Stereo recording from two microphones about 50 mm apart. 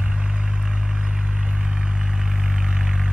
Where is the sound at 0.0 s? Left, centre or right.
Right.